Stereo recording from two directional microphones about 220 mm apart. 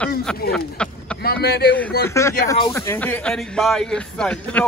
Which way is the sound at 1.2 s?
45° left (ahead or behind).